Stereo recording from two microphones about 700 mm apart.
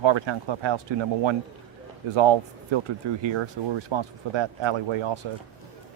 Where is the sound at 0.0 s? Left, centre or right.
Right.